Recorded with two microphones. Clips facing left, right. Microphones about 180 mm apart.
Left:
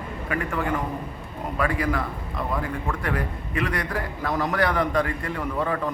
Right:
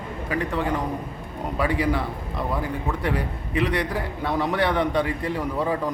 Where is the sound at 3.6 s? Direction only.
30° right (ahead or behind).